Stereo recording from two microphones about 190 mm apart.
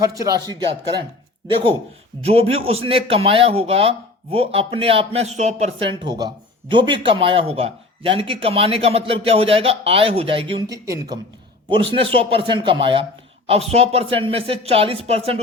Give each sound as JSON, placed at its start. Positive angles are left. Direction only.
{"t": 0.0, "sound": "speech", "side_deg": -20}
{"t": 2.2, "sound": "speech", "side_deg": -30}